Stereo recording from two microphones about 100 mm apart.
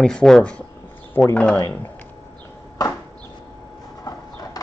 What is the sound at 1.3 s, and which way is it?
Speech, 20° left (ahead or behind).